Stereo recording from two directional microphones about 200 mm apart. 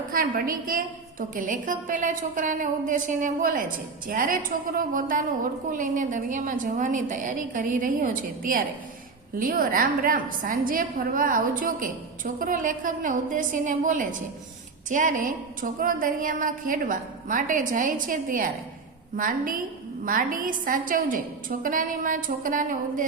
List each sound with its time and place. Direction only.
0.1 s a woman's voice: 45° right (ahead or behind)